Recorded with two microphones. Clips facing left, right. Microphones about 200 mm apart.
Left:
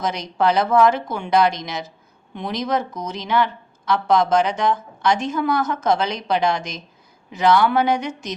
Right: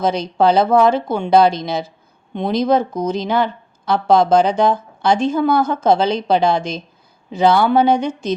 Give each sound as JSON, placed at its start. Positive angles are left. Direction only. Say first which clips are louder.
{"t": 0.0, "sound": "speech", "louder": "right 5 dB", "side_deg": -30}